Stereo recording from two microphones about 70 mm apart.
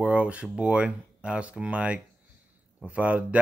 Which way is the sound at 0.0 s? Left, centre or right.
Centre.